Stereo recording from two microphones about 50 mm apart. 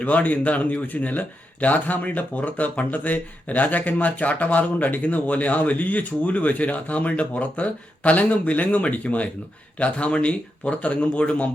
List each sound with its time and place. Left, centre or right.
0.0 s speech: left